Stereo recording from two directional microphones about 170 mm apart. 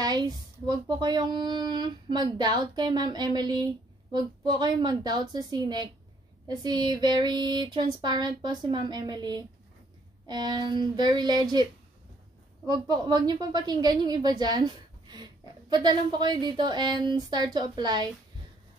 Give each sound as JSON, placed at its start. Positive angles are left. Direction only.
{"t": 0.7, "sound": "speech", "side_deg": -25}
{"t": 12.6, "sound": "speech", "side_deg": -25}